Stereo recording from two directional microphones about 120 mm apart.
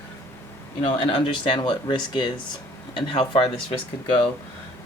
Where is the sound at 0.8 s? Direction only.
45° left (ahead or behind).